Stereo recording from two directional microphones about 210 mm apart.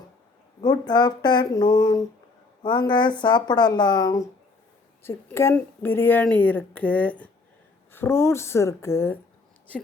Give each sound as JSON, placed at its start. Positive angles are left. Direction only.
{"t": 0.6, "sound": "speech", "side_deg": 20}